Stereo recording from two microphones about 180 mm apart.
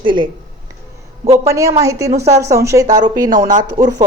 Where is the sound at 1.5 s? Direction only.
15° right (ahead or behind).